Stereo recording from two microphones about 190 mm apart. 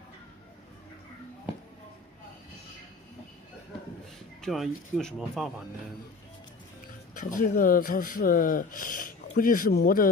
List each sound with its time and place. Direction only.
4.4 s speech: centre (ahead or behind)
7.2 s speech: 45° left (ahead or behind)